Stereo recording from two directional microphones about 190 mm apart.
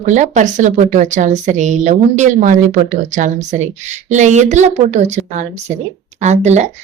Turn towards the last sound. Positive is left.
turn(degrees=-35)  # may be behind; listen again after turning